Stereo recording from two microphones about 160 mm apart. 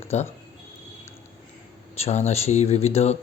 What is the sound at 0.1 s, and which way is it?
Speech, 40° left (ahead or behind).